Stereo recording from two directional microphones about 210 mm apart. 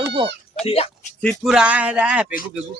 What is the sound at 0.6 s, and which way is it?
Speech, 30° left (ahead or behind).